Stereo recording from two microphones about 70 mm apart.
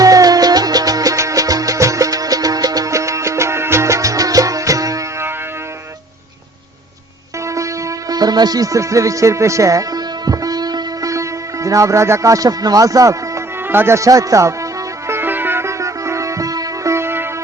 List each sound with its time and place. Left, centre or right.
0.0 s music: right
7.4 s music: right
8.2 s music: right
11.1 s speech: right
13.7 s music: right
16.9 s music: right